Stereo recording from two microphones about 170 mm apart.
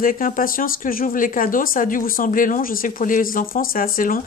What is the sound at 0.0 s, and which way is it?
Speech, 55° left (ahead or behind).